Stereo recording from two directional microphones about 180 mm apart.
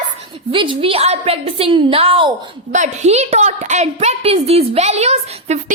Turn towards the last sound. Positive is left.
turn(degrees=-35)  # may be behind; listen again after turning